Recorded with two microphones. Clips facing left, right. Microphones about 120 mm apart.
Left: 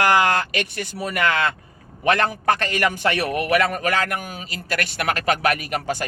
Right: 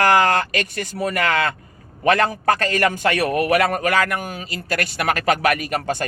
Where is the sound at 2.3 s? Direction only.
40° right (ahead or behind).